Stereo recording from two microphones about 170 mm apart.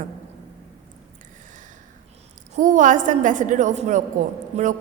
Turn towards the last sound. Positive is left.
turn(degrees=-40)  # may be behind; listen again after turning